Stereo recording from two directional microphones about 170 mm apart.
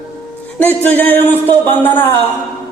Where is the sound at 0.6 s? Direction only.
10° left (ahead or behind).